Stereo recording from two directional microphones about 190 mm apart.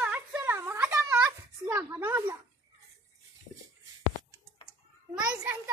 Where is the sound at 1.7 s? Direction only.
15° right (ahead or behind).